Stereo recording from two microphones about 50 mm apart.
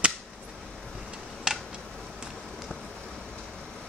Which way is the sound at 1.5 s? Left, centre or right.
Centre.